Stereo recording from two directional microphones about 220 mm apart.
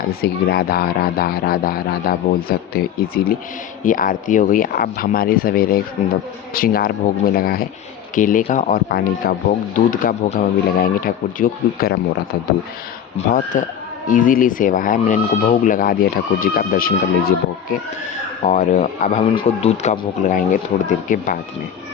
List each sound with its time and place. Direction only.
0.1 s speech: 45° left (ahead or behind)
3.8 s speech: 40° left (ahead or behind)
13.1 s speech: 35° left (ahead or behind)